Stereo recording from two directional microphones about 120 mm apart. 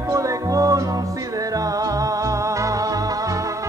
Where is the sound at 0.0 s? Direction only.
25° right (ahead or behind).